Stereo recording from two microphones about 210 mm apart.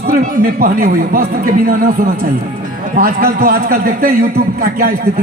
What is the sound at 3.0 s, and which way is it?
A man's voice, 45° right (ahead or behind).